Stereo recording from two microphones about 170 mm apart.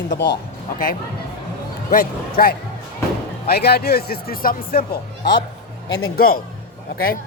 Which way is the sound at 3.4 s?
70° left (ahead or behind).